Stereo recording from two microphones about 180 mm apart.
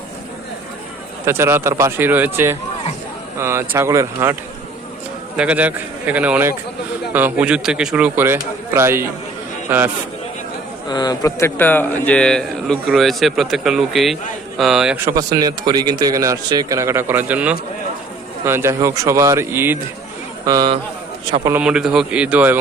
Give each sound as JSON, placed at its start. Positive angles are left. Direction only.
{"t": 1.2, "sound": "a man's voice", "side_deg": -15}
{"t": 5.4, "sound": "a man's voice", "side_deg": -5}
{"t": 10.8, "sound": "a man's voice", "side_deg": 25}
{"t": 20.4, "sound": "speech", "side_deg": -25}
{"t": 21.5, "sound": "a man's voice", "side_deg": -5}